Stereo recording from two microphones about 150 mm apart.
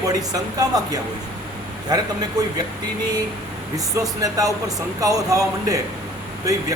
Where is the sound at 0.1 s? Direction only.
25° right (ahead or behind).